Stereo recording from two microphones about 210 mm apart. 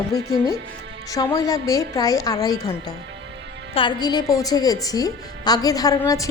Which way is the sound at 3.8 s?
20° left (ahead or behind).